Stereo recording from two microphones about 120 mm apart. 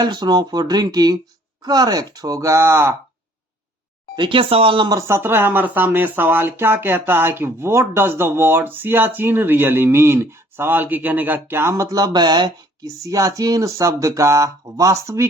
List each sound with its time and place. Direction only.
0.0 s speech: 35° right (ahead or behind)
4.1 s speech: 45° right (ahead or behind)
4.9 s speech: 25° right (ahead or behind)